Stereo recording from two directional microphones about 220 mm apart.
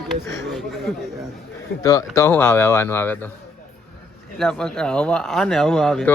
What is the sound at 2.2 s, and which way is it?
A man's voice, 10° left (ahead or behind).